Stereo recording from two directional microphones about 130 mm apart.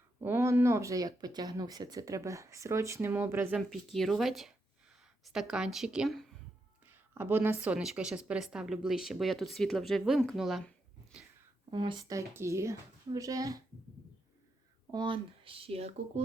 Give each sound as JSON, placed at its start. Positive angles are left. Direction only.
{"t": 0.2, "sound": "speech", "side_deg": -20}
{"t": 3.9, "sound": "a woman's voice", "side_deg": 0}
{"t": 6.8, "sound": "a woman's voice", "side_deg": -15}
{"t": 11.7, "sound": "speech", "side_deg": -35}
{"t": 12.1, "sound": "speech", "side_deg": -20}
{"t": 14.8, "sound": "speech", "side_deg": -40}